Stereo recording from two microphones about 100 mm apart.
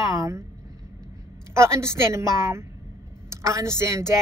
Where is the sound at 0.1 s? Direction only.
30° right (ahead or behind).